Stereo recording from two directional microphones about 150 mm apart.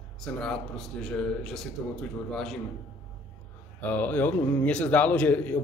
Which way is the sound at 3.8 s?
10° left (ahead or behind).